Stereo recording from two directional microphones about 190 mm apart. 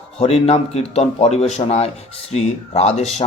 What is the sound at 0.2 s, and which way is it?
A man's voice, 35° left (ahead or behind).